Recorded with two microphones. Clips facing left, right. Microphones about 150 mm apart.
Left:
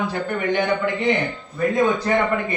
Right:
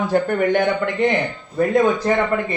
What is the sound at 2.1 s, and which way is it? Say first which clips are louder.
Speech: right 1 dB; 30° right (ahead or behind).